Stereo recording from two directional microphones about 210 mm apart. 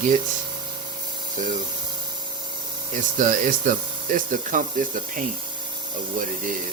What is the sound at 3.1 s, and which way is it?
Speech, 40° right (ahead or behind).